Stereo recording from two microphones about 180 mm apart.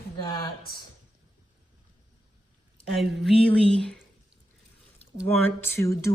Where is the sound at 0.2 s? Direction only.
25° left (ahead or behind).